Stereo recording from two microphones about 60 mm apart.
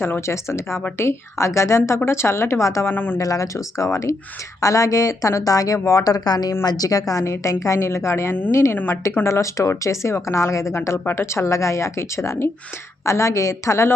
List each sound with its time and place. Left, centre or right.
0.0 s a woman's voice: left
2.9 s speech: left
3.2 s a woman's voice: left
4.6 s a woman's voice: left
7.3 s a woman's voice: left
8.7 s speech: left
9.2 s a woman's voice: left